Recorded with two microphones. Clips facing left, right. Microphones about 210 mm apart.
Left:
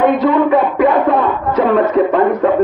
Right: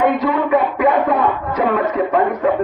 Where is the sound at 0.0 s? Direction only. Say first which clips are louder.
Left 5 dB; 30° left (ahead or behind).